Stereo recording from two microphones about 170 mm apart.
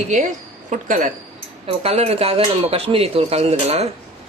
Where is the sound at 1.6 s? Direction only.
35° right (ahead or behind).